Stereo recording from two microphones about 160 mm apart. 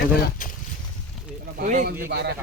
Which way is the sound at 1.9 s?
70° right (ahead or behind).